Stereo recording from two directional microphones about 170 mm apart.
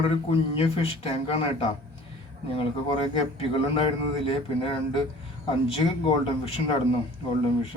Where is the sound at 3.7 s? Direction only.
30° left (ahead or behind).